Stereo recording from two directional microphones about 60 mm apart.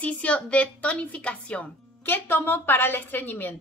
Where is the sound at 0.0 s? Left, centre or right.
Left.